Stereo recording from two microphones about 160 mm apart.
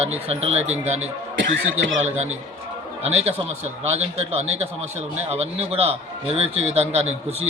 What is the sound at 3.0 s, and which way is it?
A man's voice, 40° right (ahead or behind).